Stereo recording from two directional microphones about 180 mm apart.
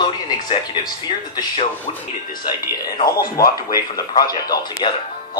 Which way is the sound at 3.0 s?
55° left (ahead or behind).